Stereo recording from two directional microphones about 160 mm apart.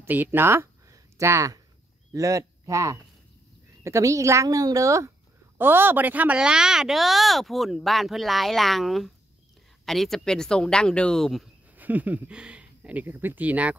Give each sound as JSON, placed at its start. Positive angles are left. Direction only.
{"t": 0.0, "sound": "speech", "side_deg": -10}
{"t": 11.7, "sound": "speech", "side_deg": -10}